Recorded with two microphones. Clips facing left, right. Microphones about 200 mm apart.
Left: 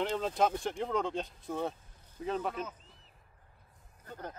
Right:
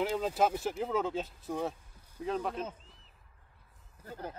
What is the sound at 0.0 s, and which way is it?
Speech, 5° right (ahead or behind).